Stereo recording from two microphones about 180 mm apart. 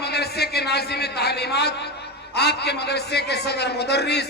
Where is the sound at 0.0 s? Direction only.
65° left (ahead or behind).